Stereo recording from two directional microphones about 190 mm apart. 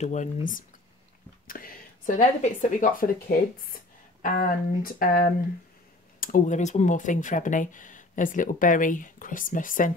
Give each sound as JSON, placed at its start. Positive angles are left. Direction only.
{"t": 0.0, "sound": "speech", "side_deg": 40}
{"t": 1.5, "sound": "speech", "side_deg": 45}